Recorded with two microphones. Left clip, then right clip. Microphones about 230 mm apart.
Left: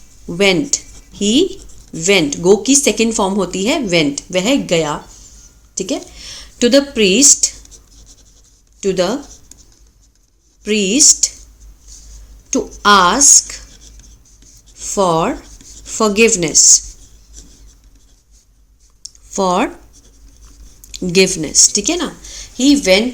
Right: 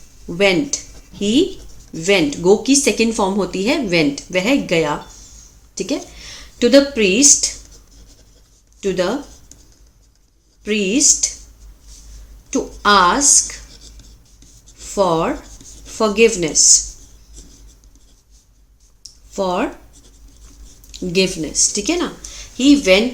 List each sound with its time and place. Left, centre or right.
0.3 s speech: left
8.8 s speech: left
10.6 s speech: left
12.5 s speech: left
14.8 s speech: left
19.0 s clicking: left
20.9 s speech: left